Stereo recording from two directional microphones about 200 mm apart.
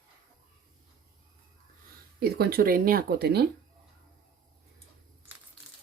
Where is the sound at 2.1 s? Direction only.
50° right (ahead or behind).